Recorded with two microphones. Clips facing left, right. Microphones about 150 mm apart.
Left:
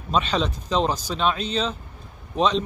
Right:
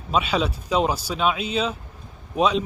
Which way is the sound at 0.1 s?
10° right (ahead or behind).